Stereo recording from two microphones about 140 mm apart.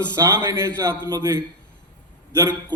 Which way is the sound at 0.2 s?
25° right (ahead or behind).